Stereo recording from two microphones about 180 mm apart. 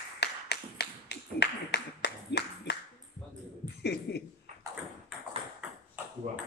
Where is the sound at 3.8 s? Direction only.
65° left (ahead or behind).